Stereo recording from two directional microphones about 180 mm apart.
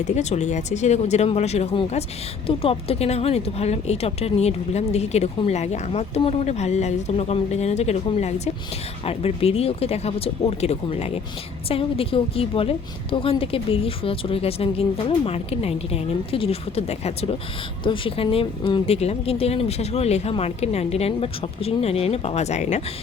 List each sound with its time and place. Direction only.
0.0 s speech: 40° left (ahead or behind)